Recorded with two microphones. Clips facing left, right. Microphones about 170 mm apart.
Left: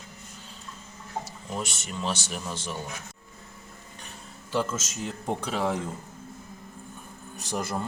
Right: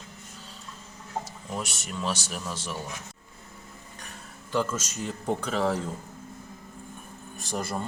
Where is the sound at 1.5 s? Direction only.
5° right (ahead or behind).